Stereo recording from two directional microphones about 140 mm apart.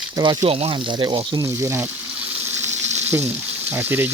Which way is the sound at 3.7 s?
15° right (ahead or behind).